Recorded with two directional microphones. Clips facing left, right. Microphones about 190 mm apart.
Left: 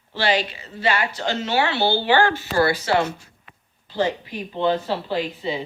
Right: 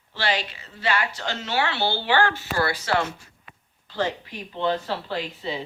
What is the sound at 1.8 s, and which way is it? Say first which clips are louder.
Speech: left 5 dB; 35° left (ahead or behind).